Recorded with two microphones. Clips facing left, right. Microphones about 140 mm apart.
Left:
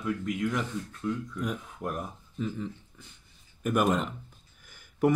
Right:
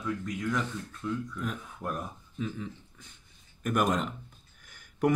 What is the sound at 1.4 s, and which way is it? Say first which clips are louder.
Speech: left 3 dB; 10° left (ahead or behind).